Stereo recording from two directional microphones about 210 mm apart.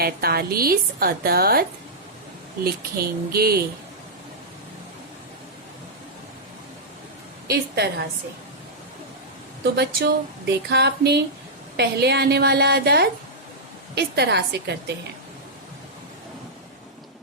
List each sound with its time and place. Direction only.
0.0 s a woman's voice: 45° right (ahead or behind)
2.6 s a woman's voice: 45° right (ahead or behind)
7.4 s a woman's voice: 50° right (ahead or behind)
9.7 s a woman's voice: 50° right (ahead or behind)